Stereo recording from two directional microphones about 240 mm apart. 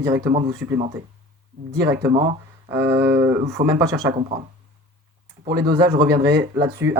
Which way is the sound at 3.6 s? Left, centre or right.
Right.